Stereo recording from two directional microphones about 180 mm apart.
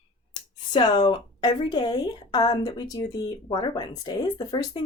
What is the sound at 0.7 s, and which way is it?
A woman's voice, 25° left (ahead or behind).